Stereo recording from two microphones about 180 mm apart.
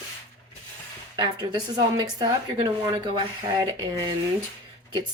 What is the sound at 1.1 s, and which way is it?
Speech, 20° right (ahead or behind).